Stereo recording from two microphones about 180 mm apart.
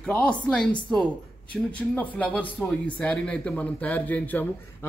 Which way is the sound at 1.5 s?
10° left (ahead or behind).